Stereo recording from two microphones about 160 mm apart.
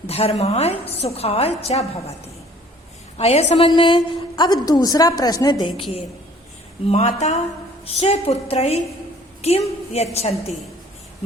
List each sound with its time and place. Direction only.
0.1 s a woman's voice: 40° left (ahead or behind)